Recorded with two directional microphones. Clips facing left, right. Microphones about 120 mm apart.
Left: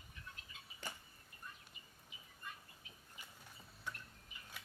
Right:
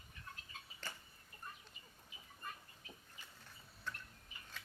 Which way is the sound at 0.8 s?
15° left (ahead or behind).